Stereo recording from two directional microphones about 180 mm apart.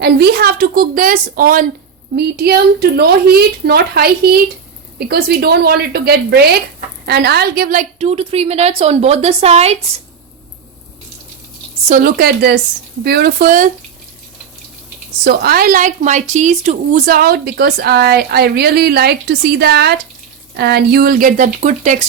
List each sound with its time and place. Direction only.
0.0 s speech: 65° right (ahead or behind)
2.1 s a woman's voice: 60° right (ahead or behind); by 9.7 s 35° right (ahead or behind)
11.9 s a woman's voice: 50° right (ahead or behind)
15.2 s speech: 60° right (ahead or behind); by 17.0 s 40° right (ahead or behind)
17.1 s a woman's voice: 60° right (ahead or behind)